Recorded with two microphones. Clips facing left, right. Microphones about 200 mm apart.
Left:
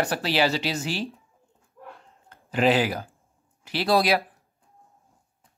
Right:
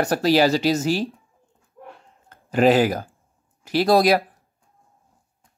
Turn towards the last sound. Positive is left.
turn(degrees=-45)  # may be behind; listen again after turning